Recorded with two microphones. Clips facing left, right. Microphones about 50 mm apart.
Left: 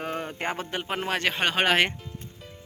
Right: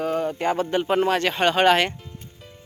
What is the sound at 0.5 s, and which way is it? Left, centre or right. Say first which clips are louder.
Speech: right 9 dB; centre.